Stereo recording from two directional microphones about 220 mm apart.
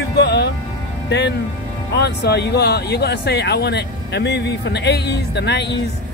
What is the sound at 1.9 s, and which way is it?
Speech, 50° left (ahead or behind).